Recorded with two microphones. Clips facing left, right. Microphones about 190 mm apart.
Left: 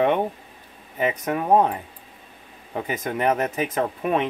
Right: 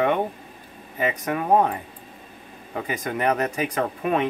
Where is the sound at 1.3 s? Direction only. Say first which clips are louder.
Left 1 dB; 20° left (ahead or behind).